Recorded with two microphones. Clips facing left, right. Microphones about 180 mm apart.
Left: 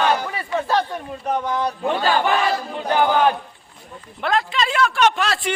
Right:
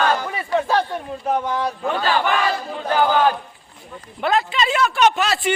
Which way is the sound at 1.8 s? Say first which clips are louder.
Left 2 dB; 20° left (ahead or behind).